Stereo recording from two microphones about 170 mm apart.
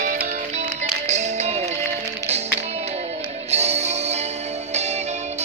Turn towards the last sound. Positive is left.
turn(degrees=-40)  # may be behind; listen again after turning